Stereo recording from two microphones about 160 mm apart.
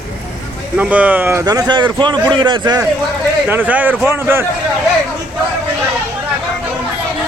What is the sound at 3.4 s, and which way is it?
A man's voice, 10° right (ahead or behind).